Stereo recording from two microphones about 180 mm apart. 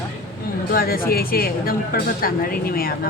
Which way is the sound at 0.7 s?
55° left (ahead or behind).